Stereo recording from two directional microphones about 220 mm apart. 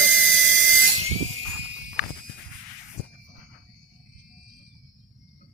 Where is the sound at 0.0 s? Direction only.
65° right (ahead or behind).